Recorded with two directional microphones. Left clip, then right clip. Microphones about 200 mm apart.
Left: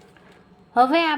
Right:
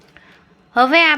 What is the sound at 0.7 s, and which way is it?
Speech, centre (ahead or behind).